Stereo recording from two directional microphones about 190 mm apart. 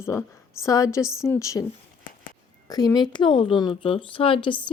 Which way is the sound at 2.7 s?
20° left (ahead or behind).